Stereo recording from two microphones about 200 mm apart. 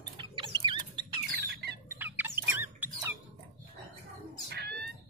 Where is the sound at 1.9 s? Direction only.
10° right (ahead or behind).